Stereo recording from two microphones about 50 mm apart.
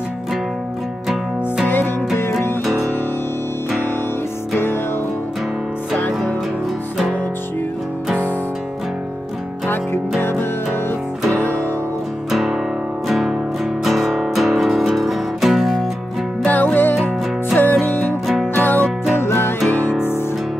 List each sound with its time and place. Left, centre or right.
1.7 s music: left
2.6 s music: centre
5.9 s music: left
11.3 s music: left
12.3 s music: centre
16.4 s music: left
18.2 s music: centre
18.6 s music: left
19.1 s music: left